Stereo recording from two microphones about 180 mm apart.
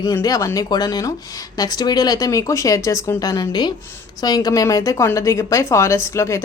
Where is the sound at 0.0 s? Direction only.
20° left (ahead or behind).